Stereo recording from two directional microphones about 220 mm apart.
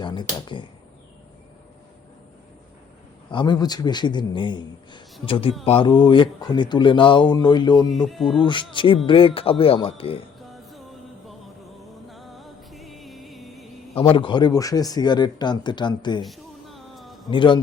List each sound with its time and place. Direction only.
0.0 s speech: 20° left (ahead or behind)
3.2 s speech: 20° left (ahead or behind)
7.9 s music: centre (ahead or behind)
8.4 s speech: 20° left (ahead or behind)
10.5 s music: centre (ahead or behind)
12.0 s music: centre (ahead or behind)
13.9 s speech: 25° left (ahead or behind)
16.2 s music: centre (ahead or behind)
17.2 s speech: 20° left (ahead or behind)